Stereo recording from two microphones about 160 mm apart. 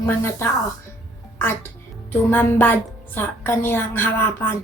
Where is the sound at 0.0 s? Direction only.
15° left (ahead or behind).